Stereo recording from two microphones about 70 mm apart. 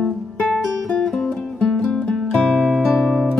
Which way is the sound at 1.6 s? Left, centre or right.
Centre.